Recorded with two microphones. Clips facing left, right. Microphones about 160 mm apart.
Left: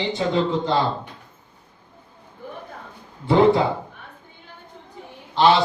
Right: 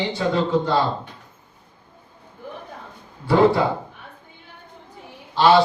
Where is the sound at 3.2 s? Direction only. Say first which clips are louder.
Left 1 dB; 20° left (ahead or behind).